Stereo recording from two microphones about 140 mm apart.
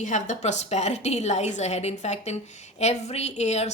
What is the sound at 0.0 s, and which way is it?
A woman's voice, 60° left (ahead or behind).